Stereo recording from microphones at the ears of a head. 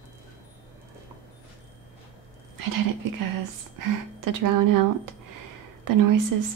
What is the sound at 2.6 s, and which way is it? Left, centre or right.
Speech, right.